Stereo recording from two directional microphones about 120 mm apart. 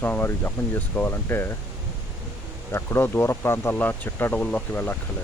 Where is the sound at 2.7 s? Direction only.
20° left (ahead or behind).